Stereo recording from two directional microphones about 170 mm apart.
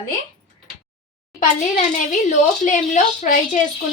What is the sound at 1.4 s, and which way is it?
Speech, 50° left (ahead or behind).